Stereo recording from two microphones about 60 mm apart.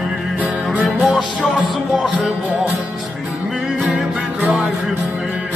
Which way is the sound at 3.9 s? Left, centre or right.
Centre.